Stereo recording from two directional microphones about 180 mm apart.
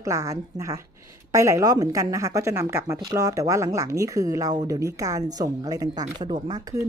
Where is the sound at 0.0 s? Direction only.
20° right (ahead or behind).